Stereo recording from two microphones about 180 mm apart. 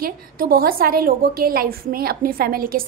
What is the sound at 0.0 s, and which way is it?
A woman's voice, 55° right (ahead or behind).